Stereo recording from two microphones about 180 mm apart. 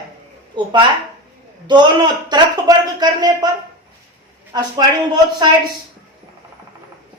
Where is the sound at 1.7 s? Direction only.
25° right (ahead or behind).